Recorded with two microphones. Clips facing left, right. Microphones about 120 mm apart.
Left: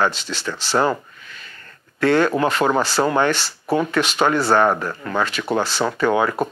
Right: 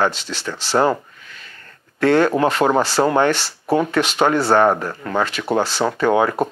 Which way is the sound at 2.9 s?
20° right (ahead or behind).